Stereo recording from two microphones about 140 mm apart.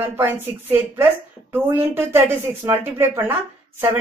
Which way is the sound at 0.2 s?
15° right (ahead or behind).